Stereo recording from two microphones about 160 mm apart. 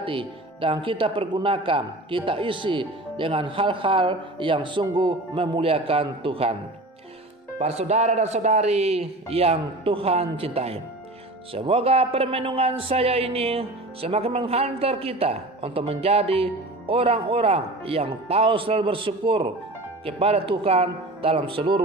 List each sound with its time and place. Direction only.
0.0 s a man's voice: 35° right (ahead or behind)
7.5 s a man's voice: 45° right (ahead or behind)